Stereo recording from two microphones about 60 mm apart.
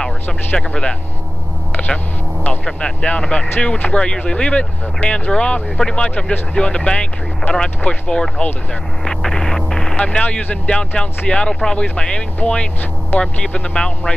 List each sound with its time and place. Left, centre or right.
0.6 s speech: centre
2.6 s speech: centre
9.0 s a sound: centre
9.9 s speech: left